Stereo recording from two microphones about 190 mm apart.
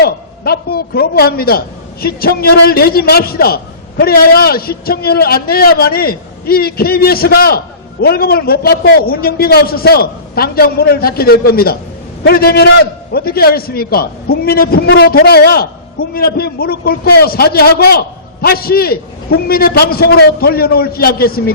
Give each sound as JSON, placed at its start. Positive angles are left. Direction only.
{"t": 0.0, "sound": "a man's voice", "side_deg": 55}